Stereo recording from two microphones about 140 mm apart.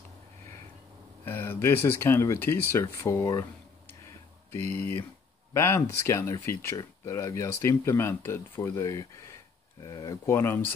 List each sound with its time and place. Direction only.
1.2 s speech: 15° left (ahead or behind)
4.6 s speech: 15° left (ahead or behind)